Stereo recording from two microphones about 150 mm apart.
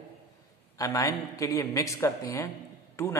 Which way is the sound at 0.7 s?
25° left (ahead or behind).